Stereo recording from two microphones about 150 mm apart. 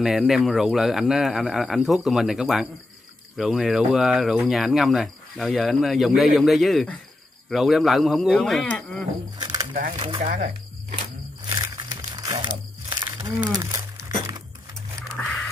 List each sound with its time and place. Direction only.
0.0 s speech: centre (ahead or behind)
9.4 s a sound: 25° right (ahead or behind)
9.9 s speech: 35° right (ahead or behind)
10.2 s speech: 55° right (ahead or behind)
11.4 s crumpling: 25° right (ahead or behind)
13.5 s speech: 20° right (ahead or behind)